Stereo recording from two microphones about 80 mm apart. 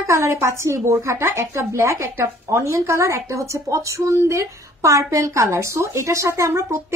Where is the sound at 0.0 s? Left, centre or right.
Right.